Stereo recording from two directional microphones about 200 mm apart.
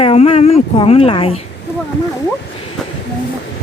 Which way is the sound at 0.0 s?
30° left (ahead or behind).